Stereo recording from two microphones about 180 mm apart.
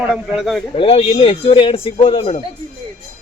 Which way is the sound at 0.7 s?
35° left (ahead or behind).